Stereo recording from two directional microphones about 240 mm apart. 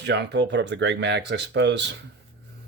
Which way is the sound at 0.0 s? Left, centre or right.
Right.